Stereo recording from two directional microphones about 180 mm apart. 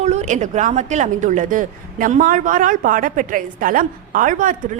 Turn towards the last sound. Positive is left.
turn(degrees=-50)  # may be behind; listen again after turning